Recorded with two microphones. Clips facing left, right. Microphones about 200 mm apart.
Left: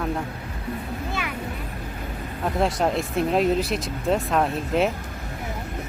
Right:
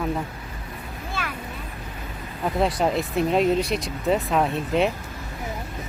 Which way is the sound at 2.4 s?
Centre (ahead or behind).